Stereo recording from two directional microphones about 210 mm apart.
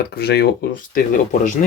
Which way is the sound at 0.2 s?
50° left (ahead or behind).